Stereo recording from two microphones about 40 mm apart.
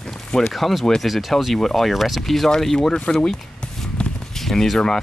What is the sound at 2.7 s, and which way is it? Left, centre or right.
Speech, centre.